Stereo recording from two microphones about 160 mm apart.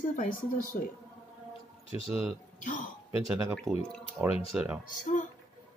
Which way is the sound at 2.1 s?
5° right (ahead or behind).